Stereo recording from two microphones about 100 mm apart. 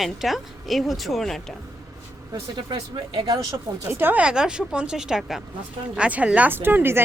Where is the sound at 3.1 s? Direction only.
40° right (ahead or behind).